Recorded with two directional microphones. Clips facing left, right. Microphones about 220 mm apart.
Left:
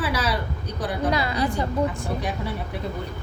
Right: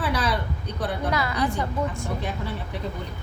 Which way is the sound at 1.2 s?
25° left (ahead or behind).